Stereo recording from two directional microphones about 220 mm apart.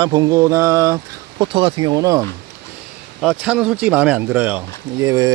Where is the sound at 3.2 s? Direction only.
5° right (ahead or behind).